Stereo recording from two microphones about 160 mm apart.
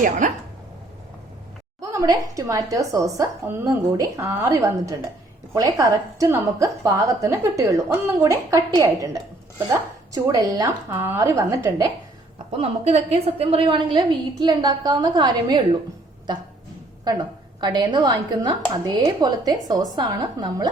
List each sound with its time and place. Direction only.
0.2 s a sound: 55° right (ahead or behind)
1.8 s speech: 20° right (ahead or behind)
10.1 s speech: 20° right (ahead or behind)
12.5 s a woman's voice: 40° right (ahead or behind)
17.0 s a woman's voice: 25° right (ahead or behind)